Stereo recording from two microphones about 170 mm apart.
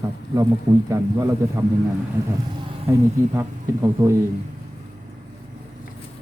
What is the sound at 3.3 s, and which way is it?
Speech, 20° right (ahead or behind).